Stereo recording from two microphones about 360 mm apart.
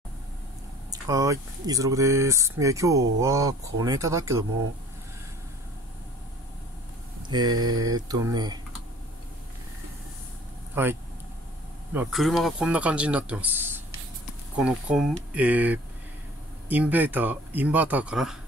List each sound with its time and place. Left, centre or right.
0.9 s speech: centre
7.2 s speech: centre
10.7 s speech: centre